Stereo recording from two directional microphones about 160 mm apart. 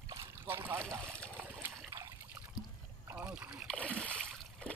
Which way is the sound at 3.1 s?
10° right (ahead or behind).